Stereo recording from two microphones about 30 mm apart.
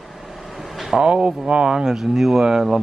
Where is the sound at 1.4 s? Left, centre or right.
Right.